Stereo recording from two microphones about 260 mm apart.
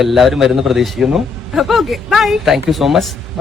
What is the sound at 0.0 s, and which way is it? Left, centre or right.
A man's voice, centre.